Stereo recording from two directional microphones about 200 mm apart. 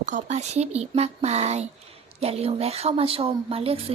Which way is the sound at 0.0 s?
35° right (ahead or behind).